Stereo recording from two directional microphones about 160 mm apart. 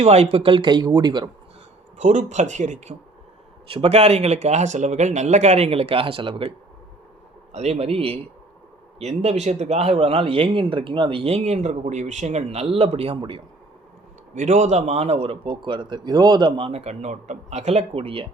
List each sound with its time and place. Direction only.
0.0 s speech: 40° right (ahead or behind)
2.0 s a man's voice: 50° right (ahead or behind)
7.5 s a man's voice: 40° right (ahead or behind)
14.3 s a man's voice: 45° right (ahead or behind)